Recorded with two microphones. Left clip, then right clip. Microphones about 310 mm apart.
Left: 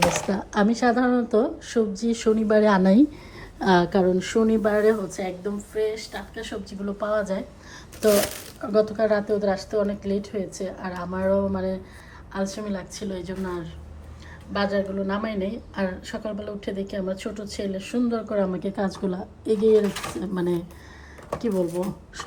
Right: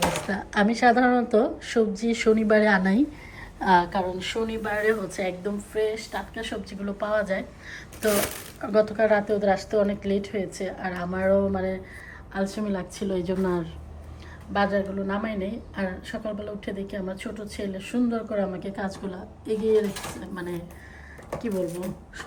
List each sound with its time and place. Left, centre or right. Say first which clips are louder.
0.1 s speech: left 2 dB; centre
4.5 s a woman's voice: left 3 dB; centre
21.2 s a woman's voice: left 3 dB; centre